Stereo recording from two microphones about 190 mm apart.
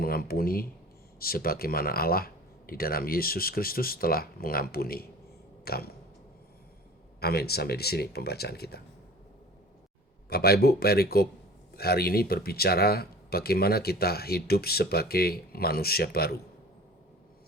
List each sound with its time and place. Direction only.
0.0 s speech: 50° left (ahead or behind)
7.2 s speech: 55° left (ahead or behind)
10.2 s speech: 55° left (ahead or behind)